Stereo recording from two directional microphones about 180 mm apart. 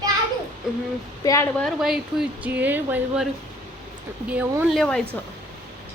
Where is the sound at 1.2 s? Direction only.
20° left (ahead or behind).